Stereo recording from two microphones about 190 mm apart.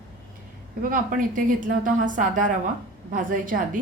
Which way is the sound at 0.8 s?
45° right (ahead or behind).